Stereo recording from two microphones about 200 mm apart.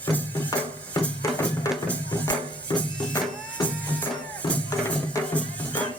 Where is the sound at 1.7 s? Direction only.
15° left (ahead or behind).